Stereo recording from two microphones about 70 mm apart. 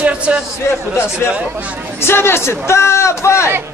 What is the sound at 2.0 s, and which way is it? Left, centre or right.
A man's voice, left.